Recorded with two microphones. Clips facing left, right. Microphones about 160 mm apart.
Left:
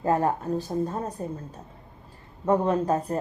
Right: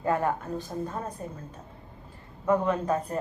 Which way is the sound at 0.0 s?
35° left (ahead or behind).